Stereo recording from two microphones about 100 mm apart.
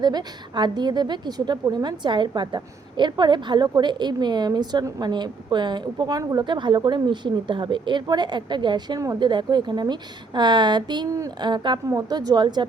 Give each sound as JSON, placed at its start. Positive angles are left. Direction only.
{"t": 0.0, "sound": "a woman's voice", "side_deg": -45}
{"t": 11.9, "sound": "a woman's voice", "side_deg": -40}